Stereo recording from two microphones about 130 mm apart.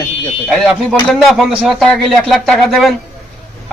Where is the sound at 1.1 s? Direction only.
Centre (ahead or behind).